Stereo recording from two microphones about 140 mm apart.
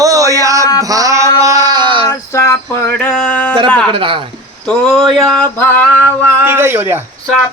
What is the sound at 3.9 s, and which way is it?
Speech, 40° right (ahead or behind).